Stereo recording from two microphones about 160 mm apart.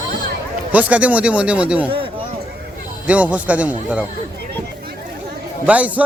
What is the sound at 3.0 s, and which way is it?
Speech, 10° right (ahead or behind).